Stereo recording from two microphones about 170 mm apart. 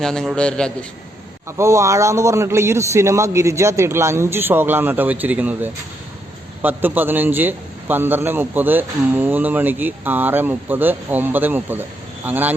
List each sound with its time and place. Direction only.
0.0 s a man's voice: 5° left (ahead or behind)
1.5 s a man's voice: 15° right (ahead or behind)